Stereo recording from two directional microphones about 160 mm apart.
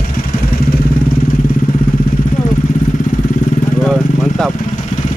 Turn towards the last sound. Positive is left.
turn(degrees=0)  # may be behind; listen again after turning